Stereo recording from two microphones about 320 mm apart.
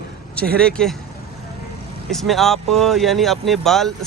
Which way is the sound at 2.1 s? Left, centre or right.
Centre.